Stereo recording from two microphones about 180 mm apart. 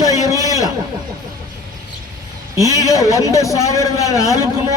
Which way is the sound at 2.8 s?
20° left (ahead or behind).